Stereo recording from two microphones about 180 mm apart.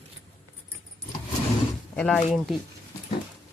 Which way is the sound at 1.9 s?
5° left (ahead or behind).